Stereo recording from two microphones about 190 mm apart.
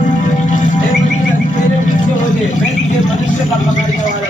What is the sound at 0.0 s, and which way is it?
Music, 40° left (ahead or behind).